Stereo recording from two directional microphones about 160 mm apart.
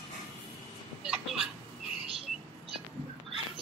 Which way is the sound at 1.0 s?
5° right (ahead or behind).